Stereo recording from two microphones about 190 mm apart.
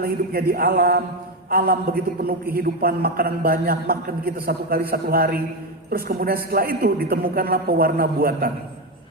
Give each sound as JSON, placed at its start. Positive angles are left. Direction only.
{"t": 0.0, "sound": "a man's voice", "side_deg": -50}